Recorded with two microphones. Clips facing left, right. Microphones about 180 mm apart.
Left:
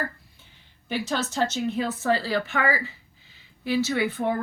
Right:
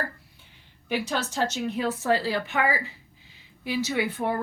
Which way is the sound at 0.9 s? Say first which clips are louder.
Even; 15° right (ahead or behind).